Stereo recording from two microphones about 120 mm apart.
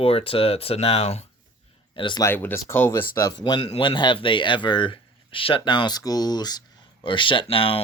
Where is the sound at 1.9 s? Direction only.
45° left (ahead or behind).